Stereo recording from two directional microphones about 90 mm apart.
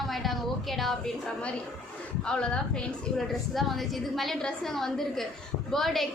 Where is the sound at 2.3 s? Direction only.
10° left (ahead or behind).